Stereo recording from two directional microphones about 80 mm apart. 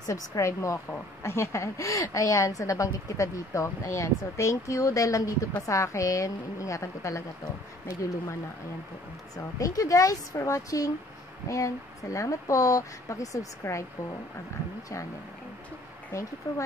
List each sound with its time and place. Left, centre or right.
0.0 s a woman's voice: left
9.6 s speech: left
16.1 s a woman's voice: left